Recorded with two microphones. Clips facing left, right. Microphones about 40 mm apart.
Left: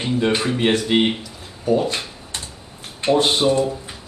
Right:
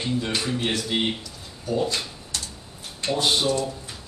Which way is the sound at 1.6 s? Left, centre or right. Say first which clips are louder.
Left 6 dB; left.